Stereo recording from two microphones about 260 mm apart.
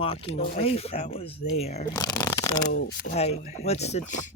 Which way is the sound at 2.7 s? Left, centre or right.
Left.